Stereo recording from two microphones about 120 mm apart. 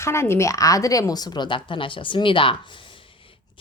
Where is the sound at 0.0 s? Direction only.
20° left (ahead or behind); by 2.6 s 45° left (ahead or behind).